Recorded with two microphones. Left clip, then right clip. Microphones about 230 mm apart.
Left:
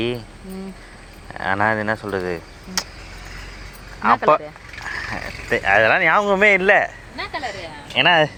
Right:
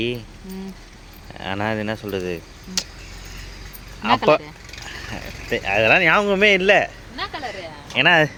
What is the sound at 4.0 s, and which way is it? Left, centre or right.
Speech, centre.